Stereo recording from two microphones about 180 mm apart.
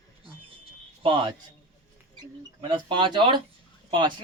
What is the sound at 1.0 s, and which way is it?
Speech, 30° right (ahead or behind).